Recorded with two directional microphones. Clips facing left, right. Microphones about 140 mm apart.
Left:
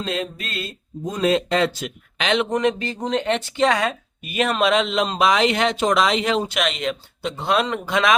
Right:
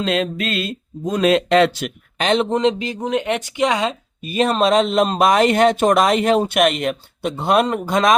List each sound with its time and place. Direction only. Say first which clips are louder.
0.0 s speech: right 6 dB; 80° right
2.1 s a man's voice: right 3 dB; 40° right (ahead or behind)
2.6 s speech: right 3 dB; 20° right (ahead or behind); by 8.1 s 45° right (ahead or behind)